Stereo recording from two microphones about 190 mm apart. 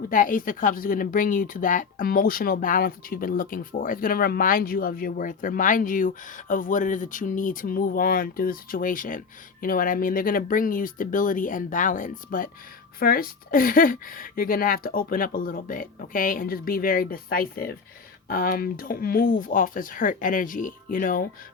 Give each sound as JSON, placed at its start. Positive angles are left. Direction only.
{"t": 0.1, "sound": "speech", "side_deg": 45}